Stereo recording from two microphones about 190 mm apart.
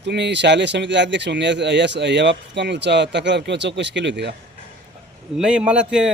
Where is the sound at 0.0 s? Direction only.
65° right (ahead or behind).